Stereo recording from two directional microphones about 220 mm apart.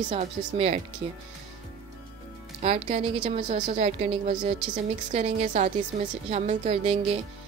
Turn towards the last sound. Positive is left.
turn(degrees=-25)  # may be behind; listen again after turning